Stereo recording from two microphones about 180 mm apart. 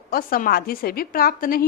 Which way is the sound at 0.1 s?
50° left (ahead or behind).